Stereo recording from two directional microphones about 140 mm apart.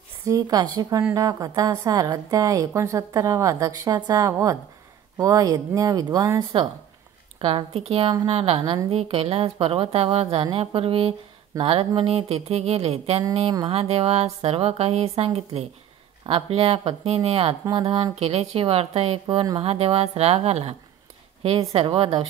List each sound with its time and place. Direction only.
0.3 s a woman's voice: 25° right (ahead or behind)
7.3 s speech: 40° right (ahead or behind)
13.4 s speech: 35° right (ahead or behind)
13.7 s speech: 45° right (ahead or behind)